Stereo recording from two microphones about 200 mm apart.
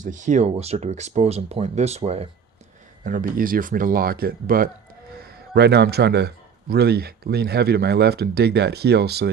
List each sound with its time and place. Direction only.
0.0 s speech: 40° right (ahead or behind)
3.0 s a man's voice: 40° right (ahead or behind)